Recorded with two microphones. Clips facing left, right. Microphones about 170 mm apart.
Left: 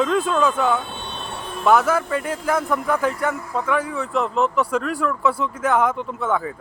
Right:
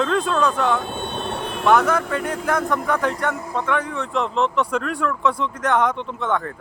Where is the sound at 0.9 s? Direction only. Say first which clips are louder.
Right 5 dB; 50° right (ahead or behind); by 1.6 s 70° right (ahead or behind).